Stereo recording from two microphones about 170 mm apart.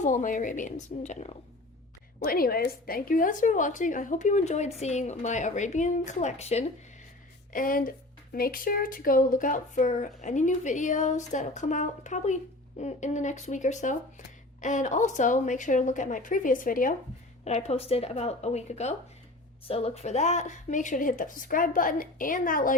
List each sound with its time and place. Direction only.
0.0 s speech: 50° left (ahead or behind)
2.2 s speech: 60° left (ahead or behind); by 6.7 s 40° left (ahead or behind)
7.5 s speech: 55° left (ahead or behind)
17.4 s speech: 40° left (ahead or behind)